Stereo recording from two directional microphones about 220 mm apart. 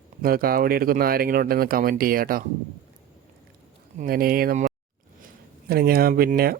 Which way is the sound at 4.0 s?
40° right (ahead or behind).